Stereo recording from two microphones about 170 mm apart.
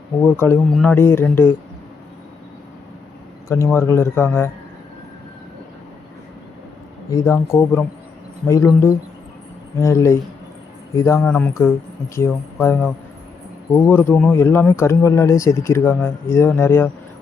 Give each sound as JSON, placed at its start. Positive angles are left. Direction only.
{"t": 0.2, "sound": "speech", "side_deg": 10}
{"t": 3.8, "sound": "speech", "side_deg": 15}
{"t": 7.1, "sound": "speech", "side_deg": 15}